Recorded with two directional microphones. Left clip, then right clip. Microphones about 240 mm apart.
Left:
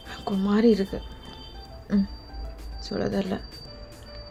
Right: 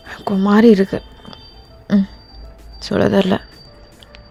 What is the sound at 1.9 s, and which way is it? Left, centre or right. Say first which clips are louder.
Music: right 9 dB; right.